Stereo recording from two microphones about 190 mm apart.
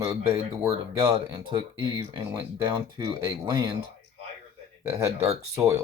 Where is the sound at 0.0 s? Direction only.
15° right (ahead or behind).